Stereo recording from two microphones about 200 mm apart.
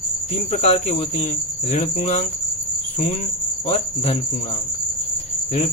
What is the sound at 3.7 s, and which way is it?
Cricket, 30° left (ahead or behind).